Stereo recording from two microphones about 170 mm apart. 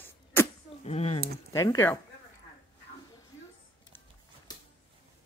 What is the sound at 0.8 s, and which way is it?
Speech, 40° left (ahead or behind).